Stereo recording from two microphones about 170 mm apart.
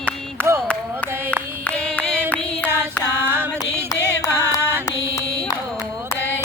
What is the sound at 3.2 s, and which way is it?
Music, 15° right (ahead or behind).